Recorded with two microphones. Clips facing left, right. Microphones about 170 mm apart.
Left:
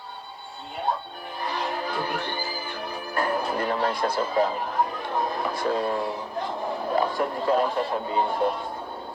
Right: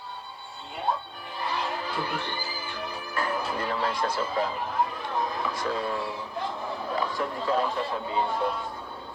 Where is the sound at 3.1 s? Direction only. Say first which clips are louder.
Left 4 dB; 40° left (ahead or behind).